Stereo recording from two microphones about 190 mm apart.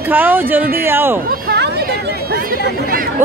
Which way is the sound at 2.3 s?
50° right (ahead or behind).